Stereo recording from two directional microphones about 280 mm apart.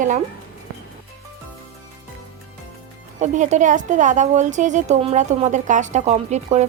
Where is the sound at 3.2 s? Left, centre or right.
Right.